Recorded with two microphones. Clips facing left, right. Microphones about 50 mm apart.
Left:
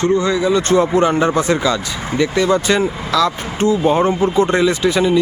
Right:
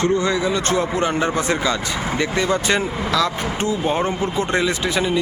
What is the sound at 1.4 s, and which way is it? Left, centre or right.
Speech, right.